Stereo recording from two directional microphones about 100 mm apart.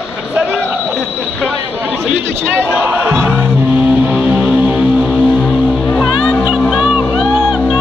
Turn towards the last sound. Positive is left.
turn(degrees=-10)  # may be behind; listen again after turning